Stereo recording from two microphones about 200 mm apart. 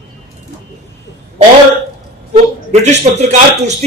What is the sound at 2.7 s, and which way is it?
A man's voice, 35° right (ahead or behind).